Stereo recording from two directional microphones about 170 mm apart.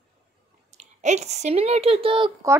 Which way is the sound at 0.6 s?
45° right (ahead or behind).